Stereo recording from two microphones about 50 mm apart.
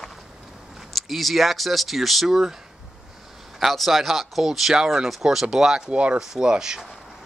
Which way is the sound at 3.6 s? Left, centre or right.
Centre.